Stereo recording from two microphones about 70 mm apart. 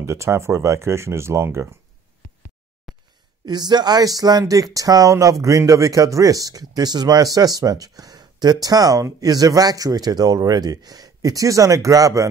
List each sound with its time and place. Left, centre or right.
0.0 s speech: right
2.9 s a sound: centre
3.4 s speech: right